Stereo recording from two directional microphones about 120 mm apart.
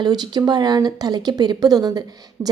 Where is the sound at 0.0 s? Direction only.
35° right (ahead or behind).